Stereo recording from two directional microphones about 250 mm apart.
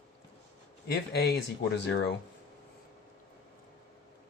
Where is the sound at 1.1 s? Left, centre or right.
Left.